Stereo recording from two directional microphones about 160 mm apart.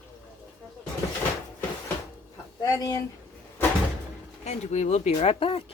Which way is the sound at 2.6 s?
25° left (ahead or behind).